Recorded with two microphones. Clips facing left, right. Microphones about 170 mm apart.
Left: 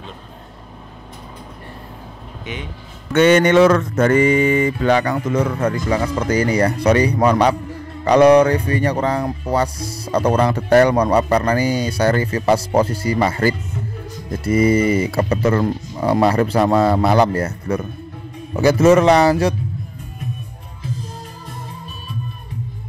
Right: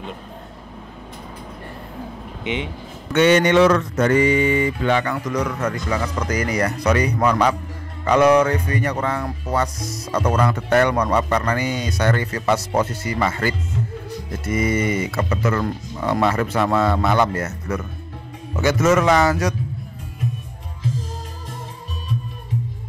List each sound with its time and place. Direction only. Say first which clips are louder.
2.4 s speech: right 5 dB; 20° right (ahead or behind)
3.2 s speech: left 3 dB; 50° left (ahead or behind); by 19.5 s 30° left (ahead or behind)